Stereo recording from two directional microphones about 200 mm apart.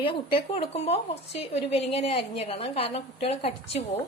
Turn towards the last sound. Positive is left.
turn(degrees=30)  # may be behind; listen again after turning